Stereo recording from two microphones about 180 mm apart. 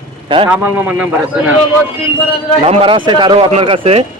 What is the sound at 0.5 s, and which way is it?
A man's voice, 10° right (ahead or behind).